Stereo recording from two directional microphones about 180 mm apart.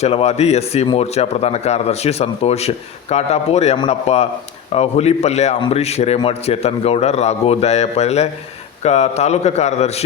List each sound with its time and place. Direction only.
0.0 s speech: 35° left (ahead or behind)